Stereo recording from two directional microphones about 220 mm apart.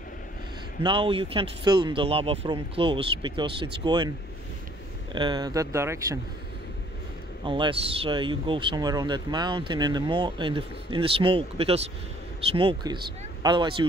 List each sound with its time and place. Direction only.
0.8 s speech: 25° right (ahead or behind)
5.1 s speech: 20° right (ahead or behind)
7.4 s speech: 20° right (ahead or behind)